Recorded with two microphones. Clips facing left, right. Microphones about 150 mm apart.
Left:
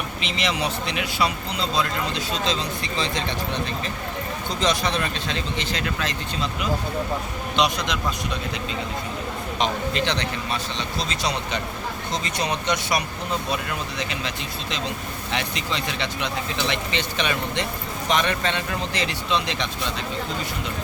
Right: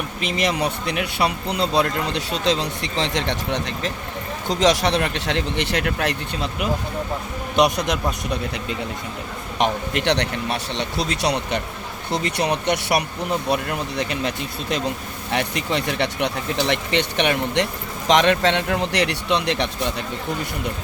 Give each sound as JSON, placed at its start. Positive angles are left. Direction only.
{"t": 0.2, "sound": "speech", "side_deg": -50}
{"t": 9.6, "sound": "speech", "side_deg": -65}